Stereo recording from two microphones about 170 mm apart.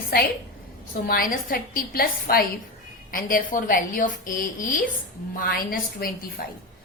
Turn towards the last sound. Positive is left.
turn(degrees=60)  # may be behind; listen again after turning